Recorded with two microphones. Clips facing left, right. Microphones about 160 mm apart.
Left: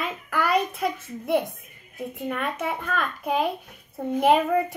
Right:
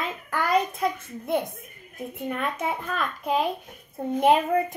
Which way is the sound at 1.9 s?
Centre (ahead or behind).